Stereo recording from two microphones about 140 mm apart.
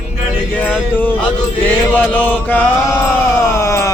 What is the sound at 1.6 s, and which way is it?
Mantra, 15° left (ahead or behind).